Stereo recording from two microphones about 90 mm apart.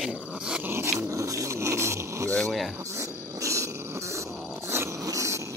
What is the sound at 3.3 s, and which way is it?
Purr, 35° right (ahead or behind).